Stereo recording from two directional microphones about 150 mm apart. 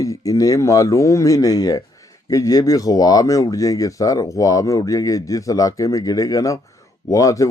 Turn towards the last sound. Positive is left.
turn(degrees=20)  # may be behind; listen again after turning